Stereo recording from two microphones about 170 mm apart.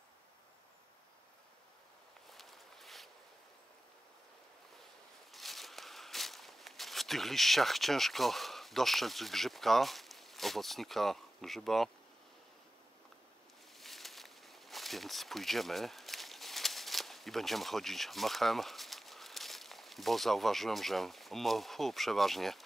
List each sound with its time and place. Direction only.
2.3 s walk: centre (ahead or behind)
5.3 s walk: centre (ahead or behind)
13.7 s a sound: centre (ahead or behind)